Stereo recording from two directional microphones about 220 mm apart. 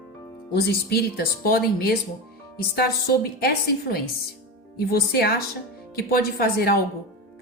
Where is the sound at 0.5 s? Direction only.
45° left (ahead or behind).